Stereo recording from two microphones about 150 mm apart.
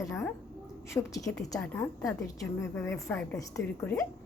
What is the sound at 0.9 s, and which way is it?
A woman's voice, 15° left (ahead or behind).